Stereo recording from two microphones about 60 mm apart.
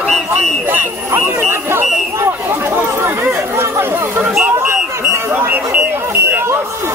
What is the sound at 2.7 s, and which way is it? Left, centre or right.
Chatter, right.